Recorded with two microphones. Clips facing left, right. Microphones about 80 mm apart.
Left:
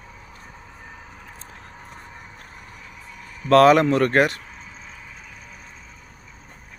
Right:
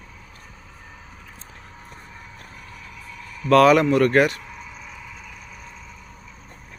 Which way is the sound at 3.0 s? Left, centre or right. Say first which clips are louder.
Right 1 dB; left.